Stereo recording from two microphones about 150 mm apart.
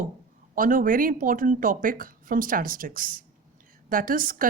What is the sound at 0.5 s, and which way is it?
A woman's voice, 65° right (ahead or behind).